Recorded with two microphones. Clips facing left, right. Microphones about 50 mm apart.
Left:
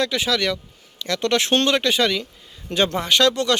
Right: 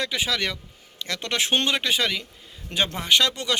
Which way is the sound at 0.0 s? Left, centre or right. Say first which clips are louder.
Left 5 dB; centre.